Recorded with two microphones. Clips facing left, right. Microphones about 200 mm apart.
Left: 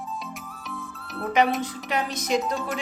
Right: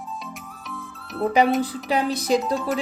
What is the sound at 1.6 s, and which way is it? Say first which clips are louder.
Speech: right 5 dB; 35° right (ahead or behind).